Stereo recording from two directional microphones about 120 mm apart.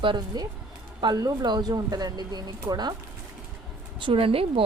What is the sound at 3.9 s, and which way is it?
Speech, 45° right (ahead or behind).